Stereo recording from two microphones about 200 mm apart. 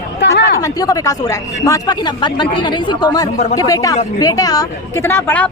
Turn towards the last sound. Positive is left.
turn(degrees=10)  # may be behind; listen again after turning